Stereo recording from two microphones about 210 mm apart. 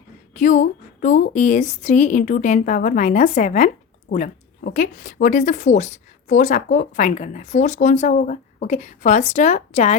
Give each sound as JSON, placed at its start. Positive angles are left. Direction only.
{"t": 0.3, "sound": "a woman's voice", "side_deg": 35}